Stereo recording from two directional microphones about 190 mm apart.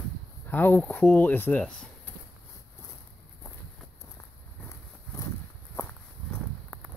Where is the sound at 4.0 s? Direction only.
15° left (ahead or behind).